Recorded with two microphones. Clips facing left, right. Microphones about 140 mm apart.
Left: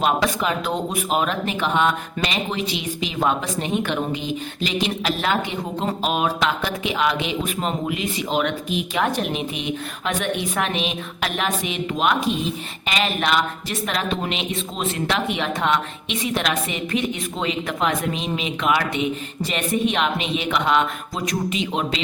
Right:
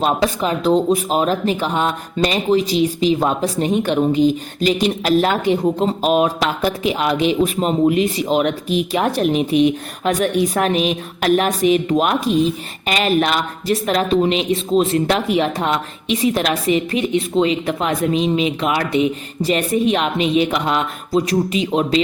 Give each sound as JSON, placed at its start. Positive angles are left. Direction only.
{"t": 0.2, "sound": "speech", "side_deg": -30}